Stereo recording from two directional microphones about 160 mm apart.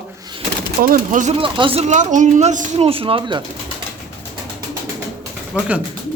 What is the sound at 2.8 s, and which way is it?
Speech, 35° right (ahead or behind).